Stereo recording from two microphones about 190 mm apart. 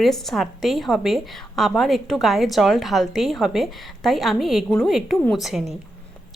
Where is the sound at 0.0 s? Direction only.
Centre (ahead or behind).